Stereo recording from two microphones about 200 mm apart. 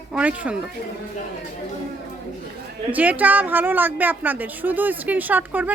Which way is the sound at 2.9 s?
10° right (ahead or behind).